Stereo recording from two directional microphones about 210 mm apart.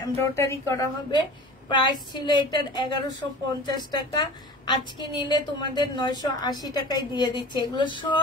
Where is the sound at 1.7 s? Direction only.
20° left (ahead or behind).